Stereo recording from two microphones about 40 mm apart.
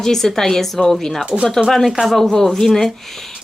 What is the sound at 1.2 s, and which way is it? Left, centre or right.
Speech, right.